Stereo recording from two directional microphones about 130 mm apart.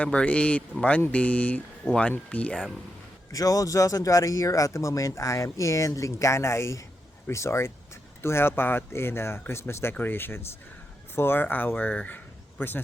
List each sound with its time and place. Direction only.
0.0 s speech: 10° left (ahead or behind)
3.3 s speech: 25° left (ahead or behind)